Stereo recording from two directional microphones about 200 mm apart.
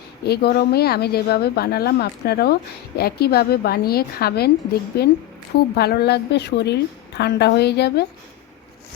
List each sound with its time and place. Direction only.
0.3 s a woman's voice: 50° left (ahead or behind)